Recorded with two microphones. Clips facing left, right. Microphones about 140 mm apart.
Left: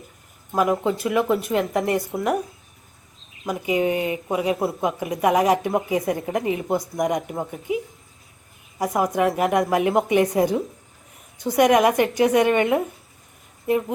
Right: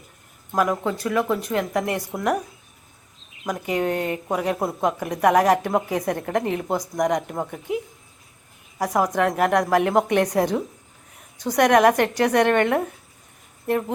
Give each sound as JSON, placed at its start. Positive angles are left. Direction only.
{"t": 0.7, "sound": "speech", "side_deg": 15}
{"t": 1.2, "sound": "a woman's voice", "side_deg": 5}
{"t": 3.4, "sound": "a woman's voice", "side_deg": 5}
{"t": 8.8, "sound": "a woman's voice", "side_deg": 0}